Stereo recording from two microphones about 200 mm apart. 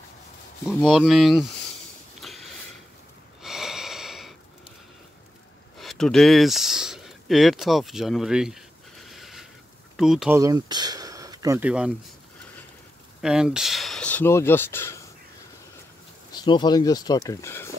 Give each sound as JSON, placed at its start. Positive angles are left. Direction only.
{"t": 0.8, "sound": "speech", "side_deg": -5}
{"t": 2.2, "sound": "sniff", "side_deg": 0}
{"t": 3.4, "sound": "a sound", "side_deg": 0}
{"t": 5.8, "sound": "a sound", "side_deg": 0}
{"t": 9.9, "sound": "speech", "side_deg": 0}
{"t": 10.3, "sound": "speech", "side_deg": -15}
{"t": 11.6, "sound": "speech", "side_deg": -5}
{"t": 13.2, "sound": "speech", "side_deg": -5}
{"t": 16.3, "sound": "speech", "side_deg": 20}